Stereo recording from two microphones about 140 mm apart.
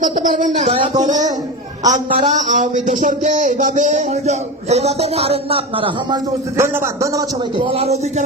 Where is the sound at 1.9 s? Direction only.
60° right (ahead or behind); by 6.2 s 35° right (ahead or behind).